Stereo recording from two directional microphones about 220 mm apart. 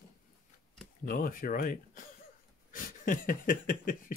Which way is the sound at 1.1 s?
40° left (ahead or behind).